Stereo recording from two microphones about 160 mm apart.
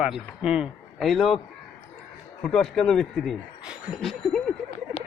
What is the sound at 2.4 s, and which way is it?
A man's voice, 5° left (ahead or behind).